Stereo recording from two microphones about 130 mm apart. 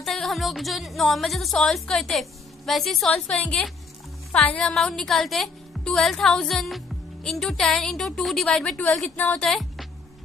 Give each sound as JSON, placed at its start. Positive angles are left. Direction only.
{"t": 0.0, "sound": "music", "side_deg": 0}
{"t": 9.5, "sound": "music", "side_deg": 0}